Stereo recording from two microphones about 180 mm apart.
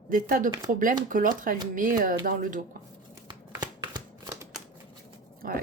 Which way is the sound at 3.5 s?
20° right (ahead or behind).